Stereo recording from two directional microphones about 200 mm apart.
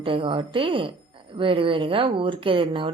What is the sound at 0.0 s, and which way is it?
Speech, 25° right (ahead or behind).